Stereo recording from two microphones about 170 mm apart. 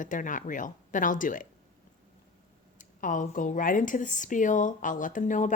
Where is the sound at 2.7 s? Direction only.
50° left (ahead or behind).